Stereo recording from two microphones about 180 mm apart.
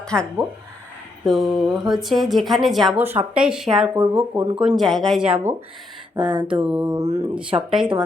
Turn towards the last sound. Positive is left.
turn(degrees=-5)  # may be behind; listen again after turning